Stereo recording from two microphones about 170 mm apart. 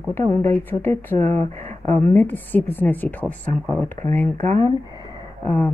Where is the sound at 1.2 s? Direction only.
40° right (ahead or behind).